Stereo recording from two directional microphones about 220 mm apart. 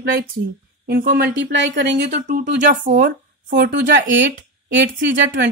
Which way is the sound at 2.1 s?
35° right (ahead or behind).